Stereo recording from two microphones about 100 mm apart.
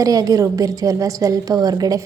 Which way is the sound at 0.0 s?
35° right (ahead or behind).